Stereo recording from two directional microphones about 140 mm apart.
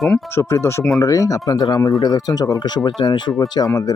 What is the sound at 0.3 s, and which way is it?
Speech, 20° left (ahead or behind).